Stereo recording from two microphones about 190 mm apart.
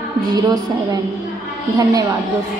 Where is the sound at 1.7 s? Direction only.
20° right (ahead or behind).